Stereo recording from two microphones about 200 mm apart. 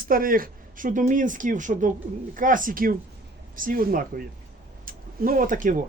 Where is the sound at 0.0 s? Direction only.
45° right (ahead or behind).